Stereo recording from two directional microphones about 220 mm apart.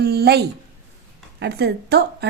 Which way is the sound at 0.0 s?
45° right (ahead or behind).